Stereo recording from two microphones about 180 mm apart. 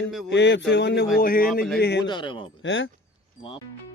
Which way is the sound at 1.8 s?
70° left (ahead or behind).